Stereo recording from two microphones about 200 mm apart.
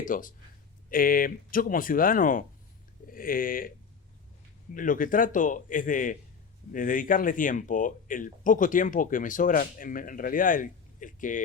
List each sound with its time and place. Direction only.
0.0 s speech: 40° left (ahead or behind)
4.7 s speech: 45° left (ahead or behind)